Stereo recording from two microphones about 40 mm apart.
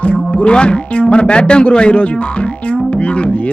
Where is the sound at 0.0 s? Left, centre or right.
Left.